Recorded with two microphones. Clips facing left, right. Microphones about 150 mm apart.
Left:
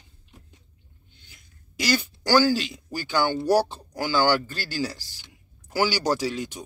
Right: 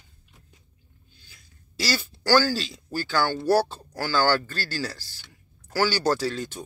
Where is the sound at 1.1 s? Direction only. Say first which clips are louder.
Left 1 dB; 20° left (ahead or behind).